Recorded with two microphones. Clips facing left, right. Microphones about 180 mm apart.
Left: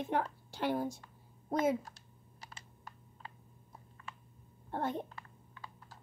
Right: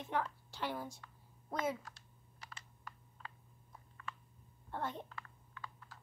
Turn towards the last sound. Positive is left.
turn(degrees=30)  # may be behind; listen again after turning